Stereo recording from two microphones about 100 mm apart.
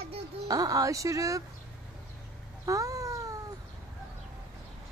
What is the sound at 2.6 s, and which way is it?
Cat, 30° right (ahead or behind).